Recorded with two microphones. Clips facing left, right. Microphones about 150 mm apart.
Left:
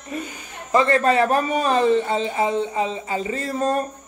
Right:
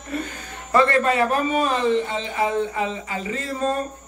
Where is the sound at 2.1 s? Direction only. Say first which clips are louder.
Left 3 dB; 25° left (ahead or behind).